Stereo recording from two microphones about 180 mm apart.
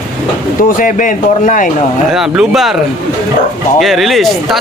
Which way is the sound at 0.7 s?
50° left (ahead or behind).